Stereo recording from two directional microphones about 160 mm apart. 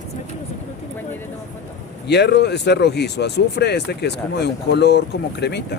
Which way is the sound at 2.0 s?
90° left.